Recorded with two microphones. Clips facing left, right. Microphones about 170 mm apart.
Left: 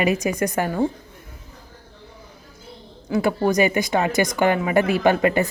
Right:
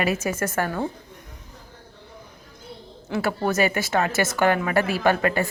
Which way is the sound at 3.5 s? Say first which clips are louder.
Left 2 dB; 15° left (ahead or behind).